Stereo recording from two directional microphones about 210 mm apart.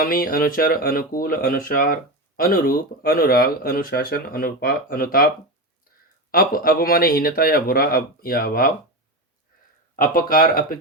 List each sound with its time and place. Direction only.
0.0 s speech: 45° left (ahead or behind)
6.3 s speech: 45° left (ahead or behind)
9.9 s speech: 40° left (ahead or behind)